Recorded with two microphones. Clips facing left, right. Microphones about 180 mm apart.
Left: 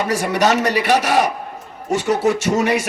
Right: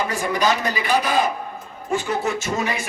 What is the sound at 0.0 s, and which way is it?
A man's voice, 80° left.